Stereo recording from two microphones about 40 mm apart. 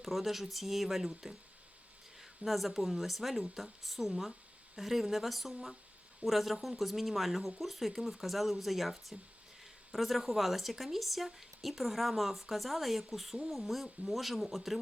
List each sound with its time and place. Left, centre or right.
0.0 s speech: centre
2.4 s speech: centre